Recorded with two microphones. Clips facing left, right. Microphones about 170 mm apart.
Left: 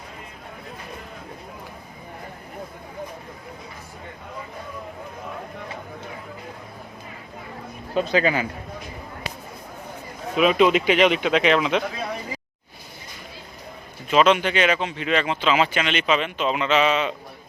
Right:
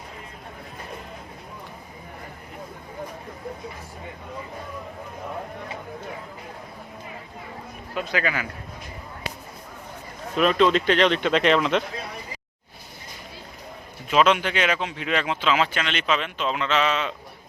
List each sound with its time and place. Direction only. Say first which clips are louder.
7.9 s speech: left 6 dB; 25° left (ahead or behind)
10.3 s speech: left 2 dB; 10° left (ahead or behind)
14.1 s speech: left 2 dB; centre (ahead or behind)